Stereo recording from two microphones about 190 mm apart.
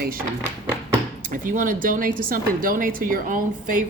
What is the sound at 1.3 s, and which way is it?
Speech, 45° right (ahead or behind).